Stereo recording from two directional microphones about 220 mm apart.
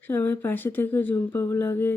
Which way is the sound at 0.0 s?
10° left (ahead or behind).